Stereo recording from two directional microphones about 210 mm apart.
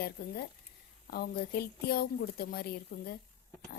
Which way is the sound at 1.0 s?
50° left (ahead or behind).